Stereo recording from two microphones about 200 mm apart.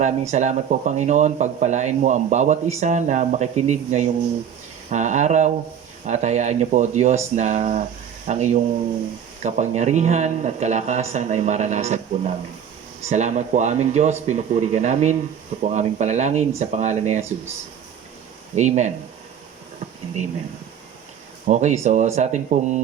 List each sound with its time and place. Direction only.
0.0 s speech: 35° right (ahead or behind)
18.5 s speech: 35° right (ahead or behind)
21.4 s speech: 35° right (ahead or behind)